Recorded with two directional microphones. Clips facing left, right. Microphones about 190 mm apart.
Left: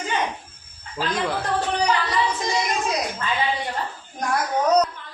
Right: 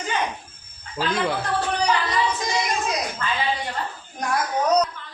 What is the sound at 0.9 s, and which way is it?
Speech, 5° right (ahead or behind).